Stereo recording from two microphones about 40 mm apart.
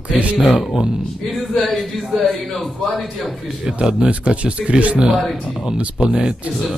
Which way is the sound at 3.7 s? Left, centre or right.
Right.